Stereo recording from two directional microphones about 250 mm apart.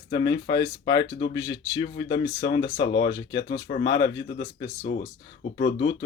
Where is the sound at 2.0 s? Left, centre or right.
Left.